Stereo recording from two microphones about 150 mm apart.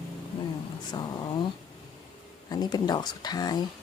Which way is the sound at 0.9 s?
30° left (ahead or behind).